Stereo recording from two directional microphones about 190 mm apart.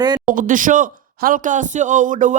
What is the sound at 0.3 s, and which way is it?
Speech, 45° right (ahead or behind).